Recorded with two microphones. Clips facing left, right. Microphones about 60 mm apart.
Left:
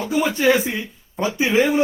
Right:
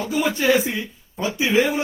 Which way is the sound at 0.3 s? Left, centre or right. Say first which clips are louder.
Even; left.